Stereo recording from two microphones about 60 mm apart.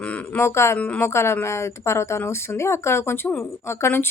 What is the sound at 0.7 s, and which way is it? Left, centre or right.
Speech, left.